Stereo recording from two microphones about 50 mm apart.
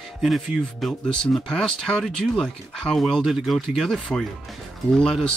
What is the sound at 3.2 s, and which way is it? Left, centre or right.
Speech, centre.